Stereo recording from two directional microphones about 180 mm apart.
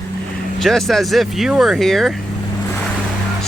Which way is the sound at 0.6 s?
Centre (ahead or behind).